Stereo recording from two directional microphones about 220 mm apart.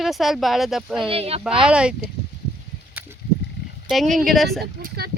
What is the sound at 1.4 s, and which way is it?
Speech, 5° right (ahead or behind).